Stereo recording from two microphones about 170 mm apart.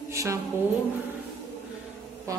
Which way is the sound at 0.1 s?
20° right (ahead or behind).